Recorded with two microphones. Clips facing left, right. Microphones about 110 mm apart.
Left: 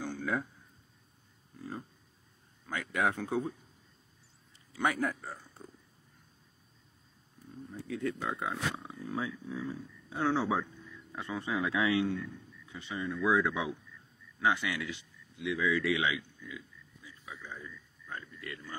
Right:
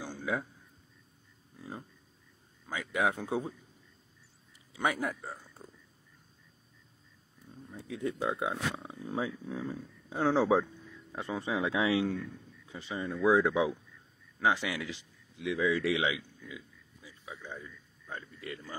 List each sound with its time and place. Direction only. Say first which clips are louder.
0.0 s a sound: left 1 dB; 5° right (ahead or behind)
1.6 s a sound: left 2 dB; 15° right (ahead or behind)
2.6 s speech: right 1 dB; 10° right (ahead or behind)
4.7 s a man's voice: left 1 dB; 5° right (ahead or behind)
7.7 s speech: even; 20° right (ahead or behind)
8.7 s speech: right 1 dB; 25° right (ahead or behind)
9.2 s speech: right 4 dB; 40° right (ahead or behind)
10.6 s speech: right 2 dB; 30° right (ahead or behind)